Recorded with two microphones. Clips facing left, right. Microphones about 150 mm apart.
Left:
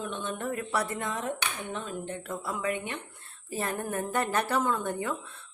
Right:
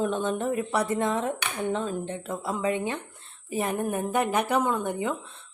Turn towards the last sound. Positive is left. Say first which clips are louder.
# right 3 dB
turn(degrees=-20)  # may be behind; listen again after turning